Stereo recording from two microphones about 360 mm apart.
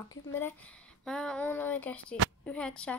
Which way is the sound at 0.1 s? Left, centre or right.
Centre.